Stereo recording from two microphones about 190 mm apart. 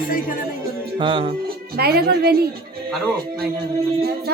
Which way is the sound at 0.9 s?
30° right (ahead or behind).